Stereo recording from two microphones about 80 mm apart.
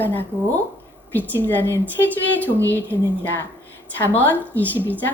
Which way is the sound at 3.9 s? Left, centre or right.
Left.